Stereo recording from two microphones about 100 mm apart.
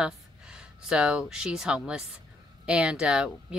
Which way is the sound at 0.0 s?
10° right (ahead or behind).